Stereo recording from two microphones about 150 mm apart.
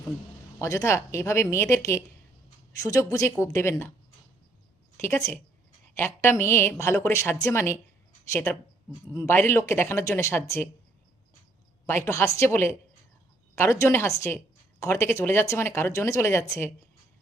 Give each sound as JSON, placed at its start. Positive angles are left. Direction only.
{"t": 0.6, "sound": "a woman's voice", "side_deg": 20}
{"t": 4.9, "sound": "a woman's voice", "side_deg": 20}
{"t": 11.9, "sound": "a woman's voice", "side_deg": 15}